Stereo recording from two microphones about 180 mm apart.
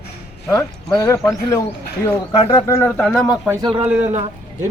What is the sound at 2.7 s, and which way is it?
Speech, 10° left (ahead or behind).